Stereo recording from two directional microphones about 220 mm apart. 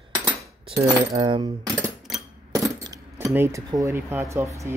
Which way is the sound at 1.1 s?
20° right (ahead or behind).